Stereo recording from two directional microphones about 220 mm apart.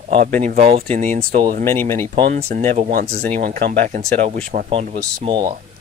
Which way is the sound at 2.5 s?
40° right (ahead or behind).